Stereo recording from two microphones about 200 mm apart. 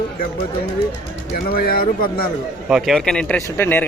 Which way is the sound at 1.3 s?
50° left (ahead or behind).